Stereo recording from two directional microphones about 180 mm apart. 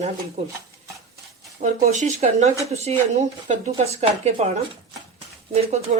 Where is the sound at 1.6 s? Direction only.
40° right (ahead or behind).